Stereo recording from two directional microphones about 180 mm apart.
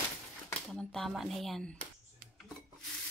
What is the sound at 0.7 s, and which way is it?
A woman's voice, centre (ahead or behind).